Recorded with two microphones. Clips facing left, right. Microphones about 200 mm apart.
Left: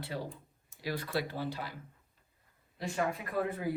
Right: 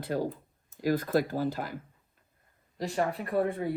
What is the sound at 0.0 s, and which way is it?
Speech, 45° right (ahead or behind).